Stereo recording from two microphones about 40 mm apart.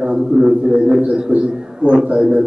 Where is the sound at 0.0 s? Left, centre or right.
Right.